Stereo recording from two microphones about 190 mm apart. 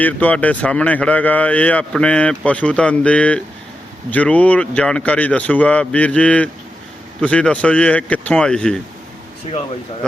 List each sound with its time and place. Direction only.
0.0 s speech: 10° left (ahead or behind)
9.5 s speech: 30° left (ahead or behind)